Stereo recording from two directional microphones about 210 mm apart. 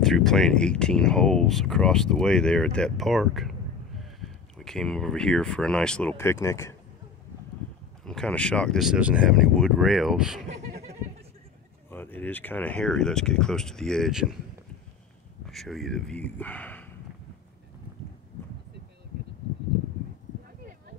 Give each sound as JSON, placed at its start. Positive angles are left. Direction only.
{"t": 0.0, "sound": "speech", "side_deg": 0}
{"t": 8.0, "sound": "speech", "side_deg": 5}
{"t": 10.5, "sound": "laughter", "side_deg": -30}
{"t": 11.9, "sound": "speech", "side_deg": 10}
{"t": 15.4, "sound": "speech", "side_deg": 0}